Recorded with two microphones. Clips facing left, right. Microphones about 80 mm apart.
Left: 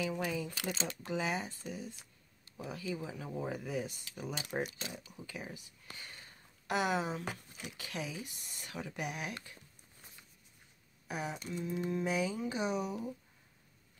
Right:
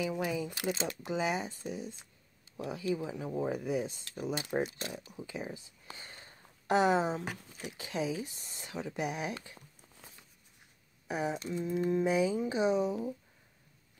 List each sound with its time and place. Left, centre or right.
0.0 s speech: centre
11.1 s speech: right